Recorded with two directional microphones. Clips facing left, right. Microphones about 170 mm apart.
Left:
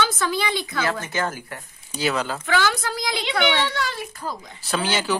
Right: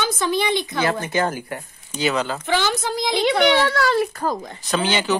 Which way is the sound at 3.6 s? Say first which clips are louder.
Right 8 dB; 70° right (ahead or behind).